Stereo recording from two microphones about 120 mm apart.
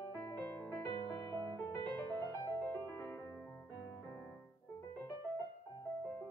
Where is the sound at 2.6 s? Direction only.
15° left (ahead or behind).